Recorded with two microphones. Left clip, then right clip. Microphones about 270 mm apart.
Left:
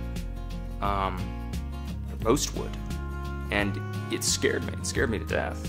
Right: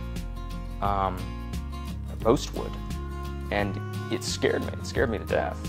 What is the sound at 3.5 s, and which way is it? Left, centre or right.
Speech, right.